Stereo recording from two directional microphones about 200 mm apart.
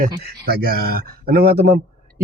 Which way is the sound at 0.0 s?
50° right (ahead or behind).